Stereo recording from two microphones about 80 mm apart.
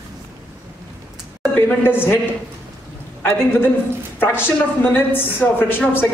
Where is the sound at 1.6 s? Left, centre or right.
Left.